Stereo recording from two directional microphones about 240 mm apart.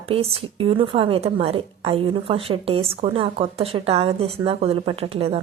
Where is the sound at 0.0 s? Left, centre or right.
Right.